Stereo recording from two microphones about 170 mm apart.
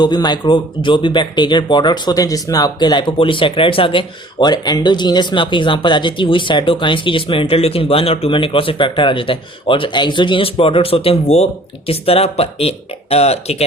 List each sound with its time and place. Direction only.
0.0 s speech: 25° left (ahead or behind)